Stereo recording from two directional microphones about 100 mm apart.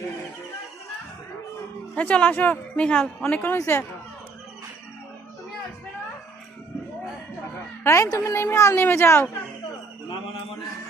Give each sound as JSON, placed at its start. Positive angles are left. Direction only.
{"t": 2.0, "sound": "speech", "side_deg": 15}
{"t": 7.9, "sound": "a child's voice", "side_deg": 30}